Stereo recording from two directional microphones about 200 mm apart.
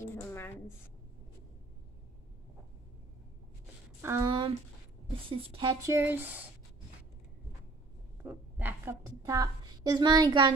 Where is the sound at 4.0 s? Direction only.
15° right (ahead or behind).